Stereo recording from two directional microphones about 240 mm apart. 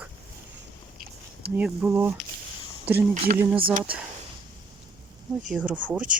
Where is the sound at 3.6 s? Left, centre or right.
Right.